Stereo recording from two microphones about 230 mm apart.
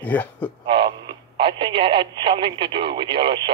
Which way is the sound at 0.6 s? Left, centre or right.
Right.